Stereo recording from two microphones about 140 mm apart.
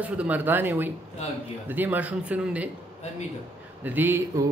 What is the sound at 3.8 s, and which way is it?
Speech, 15° right (ahead or behind).